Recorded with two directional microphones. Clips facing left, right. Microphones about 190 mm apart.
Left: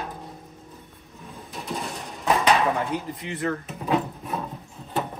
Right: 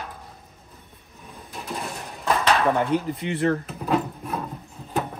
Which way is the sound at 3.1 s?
30° right (ahead or behind).